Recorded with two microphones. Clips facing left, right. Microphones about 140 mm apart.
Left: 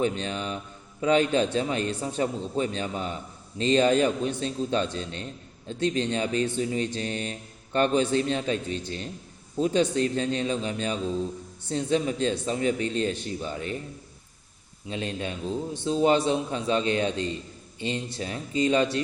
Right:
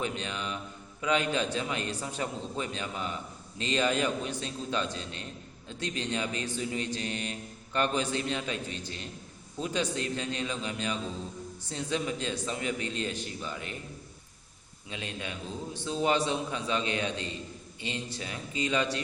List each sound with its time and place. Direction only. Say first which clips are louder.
0.0 s a man's voice: left 7 dB; 35° left (ahead or behind)
14.8 s speech: left 7 dB; 35° left (ahead or behind)